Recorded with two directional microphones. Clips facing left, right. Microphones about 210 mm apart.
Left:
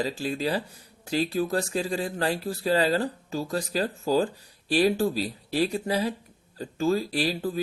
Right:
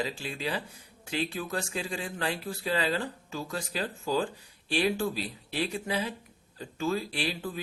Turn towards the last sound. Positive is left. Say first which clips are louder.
# left 7 dB
turn(degrees=40)  # may be behind; listen again after turning